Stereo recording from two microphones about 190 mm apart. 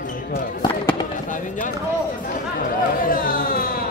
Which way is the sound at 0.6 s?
25° left (ahead or behind).